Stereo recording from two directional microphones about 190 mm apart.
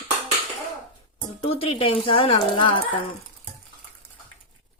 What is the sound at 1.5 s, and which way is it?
Speech, 30° left (ahead or behind).